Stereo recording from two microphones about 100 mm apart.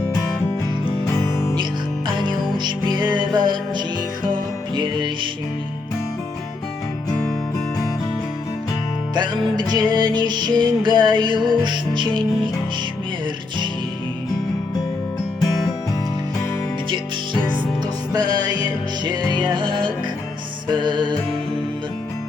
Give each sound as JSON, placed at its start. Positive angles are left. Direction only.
{"t": 1.0, "sound": "music", "side_deg": 30}
{"t": 2.0, "sound": "music", "side_deg": -50}
{"t": 7.1, "sound": "music", "side_deg": 5}
{"t": 9.1, "sound": "music", "side_deg": -50}
{"t": 18.1, "sound": "music", "side_deg": -40}